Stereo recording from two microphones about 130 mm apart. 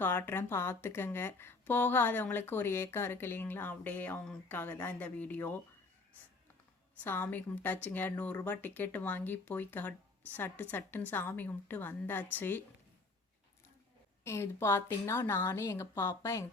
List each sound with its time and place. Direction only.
0.0 s speech: 15° left (ahead or behind)
7.0 s speech: 15° left (ahead or behind)
14.3 s speech: 20° left (ahead or behind)